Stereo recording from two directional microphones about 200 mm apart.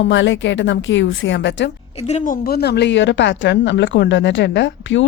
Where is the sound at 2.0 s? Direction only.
35° left (ahead or behind).